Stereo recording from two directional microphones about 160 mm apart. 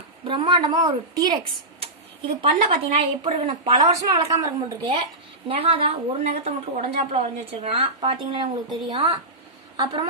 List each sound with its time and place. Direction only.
0.2 s speech: 30° right (ahead or behind)
3.8 s a woman's voice: 20° right (ahead or behind)